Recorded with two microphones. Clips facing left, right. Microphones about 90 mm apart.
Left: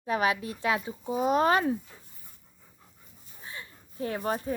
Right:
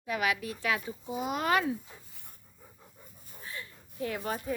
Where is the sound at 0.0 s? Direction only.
35° left (ahead or behind).